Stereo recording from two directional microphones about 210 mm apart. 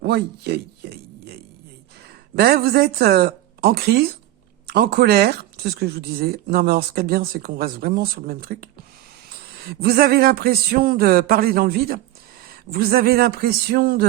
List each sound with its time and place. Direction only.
0.0 s speech: 50° right (ahead or behind)
2.3 s speech: 45° right (ahead or behind)